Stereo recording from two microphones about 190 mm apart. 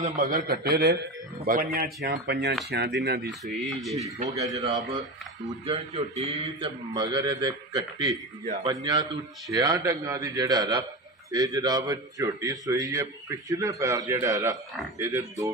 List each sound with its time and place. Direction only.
0.0 s a man's voice: 45° right (ahead or behind)
3.3 s speech: centre (ahead or behind)
4.4 s speech: 20° right (ahead or behind)
5.7 s speech: 30° right (ahead or behind)